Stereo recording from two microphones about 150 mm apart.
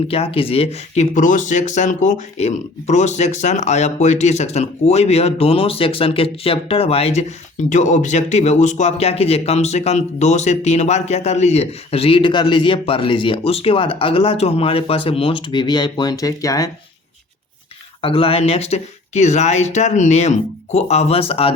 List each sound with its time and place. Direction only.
0.1 s speech: 40° left (ahead or behind); by 16.6 s 25° left (ahead or behind)
18.0 s speech: 35° left (ahead or behind)